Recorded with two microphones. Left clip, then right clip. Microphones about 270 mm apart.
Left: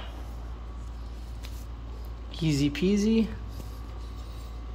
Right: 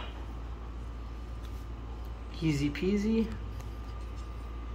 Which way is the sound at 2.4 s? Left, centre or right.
Left.